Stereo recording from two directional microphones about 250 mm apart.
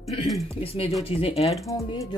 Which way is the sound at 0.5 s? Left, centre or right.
Left.